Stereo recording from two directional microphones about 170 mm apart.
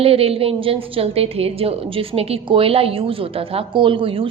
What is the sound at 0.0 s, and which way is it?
A woman's voice, 35° right (ahead or behind).